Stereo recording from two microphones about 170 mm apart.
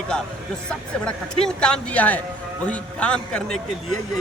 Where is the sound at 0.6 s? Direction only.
5° left (ahead or behind).